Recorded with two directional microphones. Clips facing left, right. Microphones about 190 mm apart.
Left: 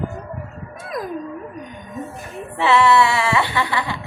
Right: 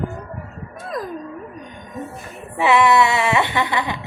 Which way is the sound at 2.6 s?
15° right (ahead or behind).